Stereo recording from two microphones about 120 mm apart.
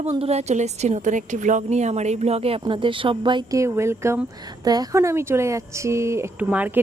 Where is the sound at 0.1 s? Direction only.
65° right (ahead or behind); by 3.4 s 45° right (ahead or behind).